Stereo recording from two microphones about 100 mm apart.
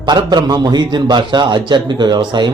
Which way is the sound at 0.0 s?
45° right (ahead or behind).